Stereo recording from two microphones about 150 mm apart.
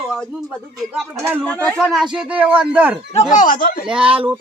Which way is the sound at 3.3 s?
65° left (ahead or behind).